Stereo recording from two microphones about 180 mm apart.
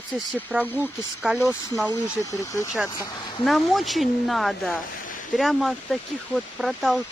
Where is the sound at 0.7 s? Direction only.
10° left (ahead or behind).